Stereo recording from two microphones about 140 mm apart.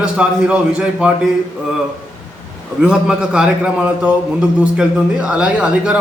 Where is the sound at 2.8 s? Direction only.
5° right (ahead or behind).